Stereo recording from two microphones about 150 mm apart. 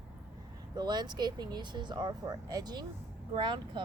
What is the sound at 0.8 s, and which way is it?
Speech, 30° right (ahead or behind).